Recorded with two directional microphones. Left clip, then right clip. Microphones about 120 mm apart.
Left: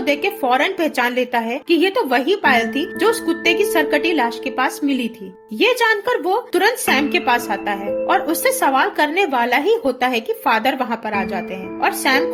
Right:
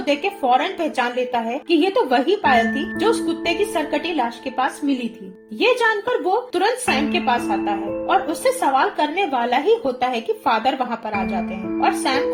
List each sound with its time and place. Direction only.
0.0 s a woman's voice: 35° left (ahead or behind)